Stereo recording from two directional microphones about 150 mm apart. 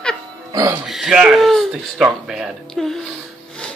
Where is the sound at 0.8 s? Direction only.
5° right (ahead or behind).